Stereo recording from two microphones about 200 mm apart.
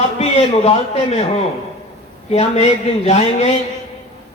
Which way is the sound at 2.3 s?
30° left (ahead or behind).